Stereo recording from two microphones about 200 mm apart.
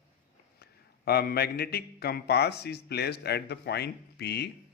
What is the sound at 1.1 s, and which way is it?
A man's voice, 50° left (ahead or behind).